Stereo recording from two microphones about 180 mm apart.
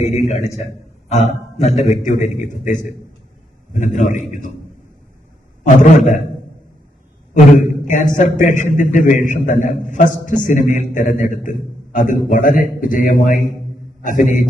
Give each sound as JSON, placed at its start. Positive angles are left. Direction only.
{"t": 0.0, "sound": "a man's voice", "side_deg": 40}
{"t": 5.6, "sound": "a man's voice", "side_deg": 45}
{"t": 7.3, "sound": "a man's voice", "side_deg": 45}